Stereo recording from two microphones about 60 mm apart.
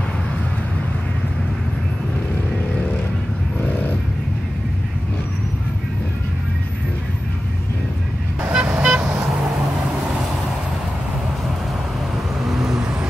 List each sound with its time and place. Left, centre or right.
8.4 s vehicle: right
12.4 s vehicle: centre